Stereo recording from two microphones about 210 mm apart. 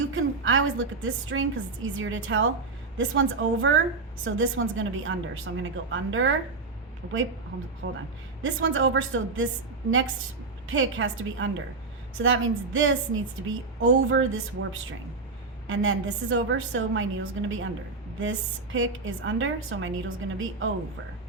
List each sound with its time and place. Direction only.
0.1 s a woman's voice: 70° right (ahead or behind)
7.8 s speech: 60° right (ahead or behind)
8.4 s a woman's voice: 70° right (ahead or behind)
10.7 s a woman's voice: 70° right (ahead or behind)